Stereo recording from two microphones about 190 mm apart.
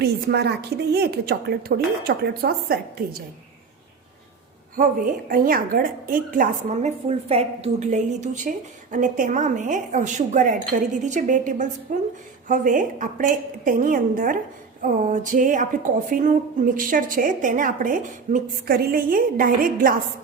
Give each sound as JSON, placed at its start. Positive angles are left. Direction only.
{"t": 0.0, "sound": "a woman's voice", "side_deg": -60}
{"t": 4.8, "sound": "a woman's voice", "side_deg": -45}